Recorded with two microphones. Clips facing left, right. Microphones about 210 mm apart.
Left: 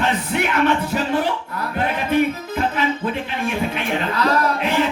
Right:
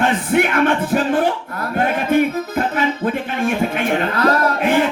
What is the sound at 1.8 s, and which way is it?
Music, 50° right (ahead or behind).